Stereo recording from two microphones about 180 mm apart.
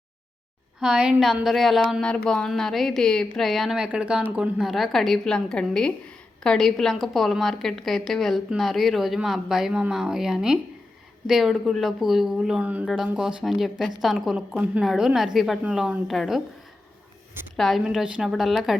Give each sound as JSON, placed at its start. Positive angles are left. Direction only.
{"t": 0.8, "sound": "a woman's voice", "side_deg": -5}
{"t": 17.6, "sound": "a woman's voice", "side_deg": 0}